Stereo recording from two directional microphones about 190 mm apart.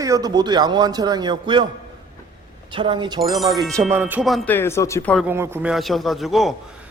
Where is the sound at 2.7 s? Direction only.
25° right (ahead or behind).